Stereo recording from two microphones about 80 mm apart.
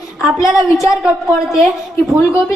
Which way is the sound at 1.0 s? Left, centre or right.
Centre.